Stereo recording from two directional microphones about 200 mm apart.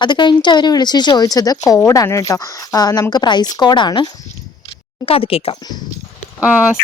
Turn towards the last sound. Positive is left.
turn(degrees=-5)  # may be behind; listen again after turning